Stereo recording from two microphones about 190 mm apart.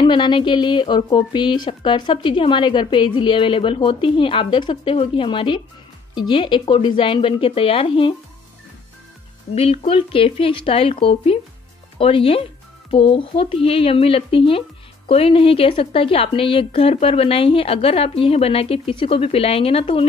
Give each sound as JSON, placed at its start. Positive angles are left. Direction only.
{"t": 0.0, "sound": "speech", "side_deg": 25}
{"t": 9.6, "sound": "speech", "side_deg": 30}